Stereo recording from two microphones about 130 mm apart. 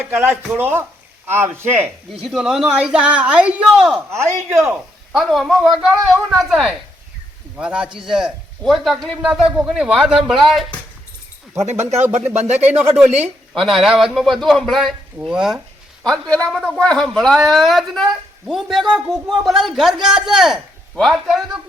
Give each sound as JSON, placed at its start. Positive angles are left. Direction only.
{"t": 0.0, "sound": "speech", "side_deg": -15}
{"t": 1.8, "sound": "a woman's voice", "side_deg": 0}
{"t": 4.1, "sound": "speech", "side_deg": -20}
{"t": 5.1, "sound": "a woman's voice", "side_deg": 0}
{"t": 11.5, "sound": "speech", "side_deg": -60}
{"t": 13.5, "sound": "a woman's voice", "side_deg": 0}
{"t": 16.0, "sound": "a woman's voice", "side_deg": 5}